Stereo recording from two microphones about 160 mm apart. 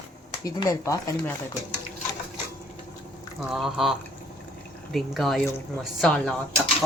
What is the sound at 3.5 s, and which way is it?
Speech, centre (ahead or behind).